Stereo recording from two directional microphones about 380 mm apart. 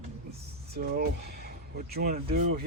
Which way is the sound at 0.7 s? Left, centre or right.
Right.